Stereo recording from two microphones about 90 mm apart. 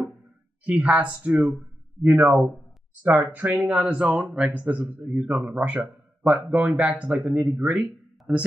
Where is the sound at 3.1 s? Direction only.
15° right (ahead or behind).